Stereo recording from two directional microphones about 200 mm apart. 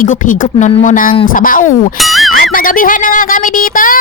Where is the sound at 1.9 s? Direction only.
Centre (ahead or behind).